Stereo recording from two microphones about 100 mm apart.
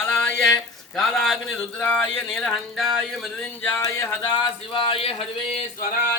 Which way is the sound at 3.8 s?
30° left (ahead or behind).